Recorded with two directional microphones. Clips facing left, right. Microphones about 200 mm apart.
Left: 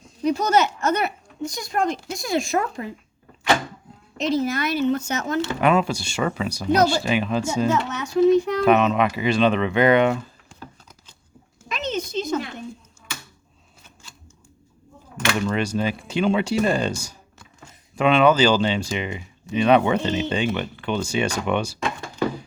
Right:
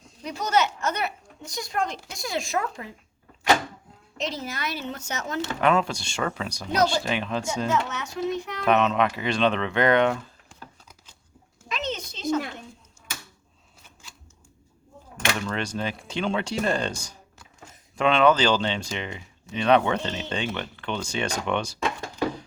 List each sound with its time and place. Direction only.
0.3 s speech: 45° left (ahead or behind)
4.2 s speech: 50° left (ahead or behind)
5.5 s speech: 10° left (ahead or behind)
7.7 s speech: 35° left (ahead or behind)
8.6 s speech: 5° left (ahead or behind)
11.7 s a sound: 50° left (ahead or behind)
15.4 s speech: 10° left (ahead or behind)